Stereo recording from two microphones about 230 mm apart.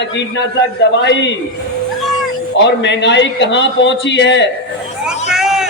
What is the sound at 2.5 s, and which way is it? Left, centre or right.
A man's voice, left.